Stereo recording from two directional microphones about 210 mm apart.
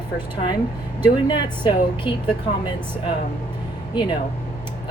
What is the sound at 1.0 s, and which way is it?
Speech, 20° left (ahead or behind).